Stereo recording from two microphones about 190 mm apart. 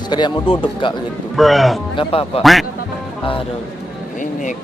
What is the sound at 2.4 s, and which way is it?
Speech, centre (ahead or behind).